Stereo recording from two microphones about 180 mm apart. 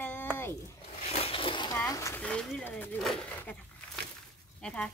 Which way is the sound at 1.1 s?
30° left (ahead or behind).